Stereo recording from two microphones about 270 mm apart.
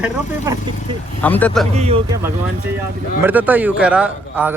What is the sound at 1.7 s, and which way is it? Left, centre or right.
Speech, right.